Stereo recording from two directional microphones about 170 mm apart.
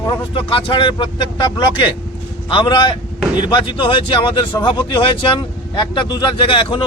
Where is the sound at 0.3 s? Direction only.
30° left (ahead or behind).